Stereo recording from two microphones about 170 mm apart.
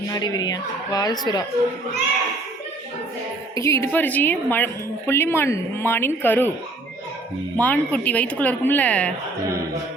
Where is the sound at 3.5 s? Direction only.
15° left (ahead or behind).